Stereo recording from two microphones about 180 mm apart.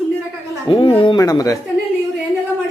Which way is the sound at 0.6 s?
30° left (ahead or behind).